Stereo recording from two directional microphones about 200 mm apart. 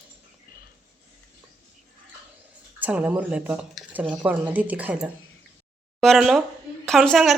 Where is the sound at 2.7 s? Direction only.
10° right (ahead or behind).